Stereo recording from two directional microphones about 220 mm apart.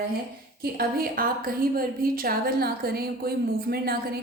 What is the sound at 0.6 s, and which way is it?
A woman's voice, 45° right (ahead or behind).